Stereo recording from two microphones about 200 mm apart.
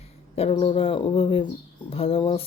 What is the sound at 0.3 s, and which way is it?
Speech, 30° left (ahead or behind).